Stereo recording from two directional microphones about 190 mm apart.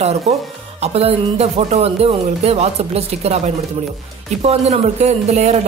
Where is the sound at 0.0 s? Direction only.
35° right (ahead or behind).